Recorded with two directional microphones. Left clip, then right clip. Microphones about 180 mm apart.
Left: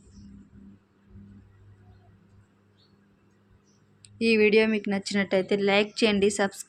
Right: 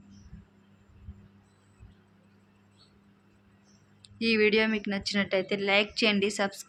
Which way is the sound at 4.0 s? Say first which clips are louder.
Left 3 dB; 25° left (ahead or behind).